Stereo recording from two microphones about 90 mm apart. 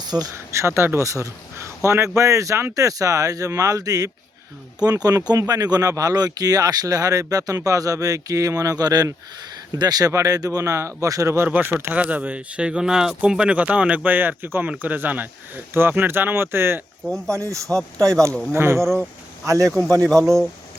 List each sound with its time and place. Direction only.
0.0 s speech: 50° right (ahead or behind)
0.3 s speech: 30° right (ahead or behind)
11.7 s speech: 20° right (ahead or behind); by 19.7 s 35° right (ahead or behind)